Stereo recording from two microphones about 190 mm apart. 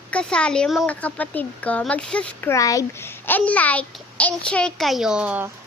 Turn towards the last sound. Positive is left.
turn(degrees=-10)  # may be behind; listen again after turning